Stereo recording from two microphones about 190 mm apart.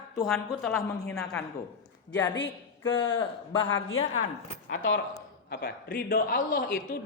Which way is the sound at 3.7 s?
90° left.